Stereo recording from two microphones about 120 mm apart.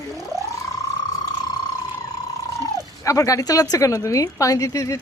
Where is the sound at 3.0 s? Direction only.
25° left (ahead or behind).